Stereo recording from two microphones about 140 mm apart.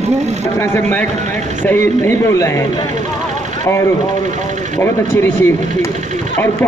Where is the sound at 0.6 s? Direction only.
15° left (ahead or behind).